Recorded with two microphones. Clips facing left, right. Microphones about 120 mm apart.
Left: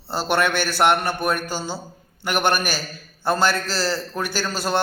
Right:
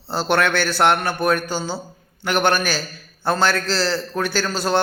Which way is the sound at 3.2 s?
5° left (ahead or behind).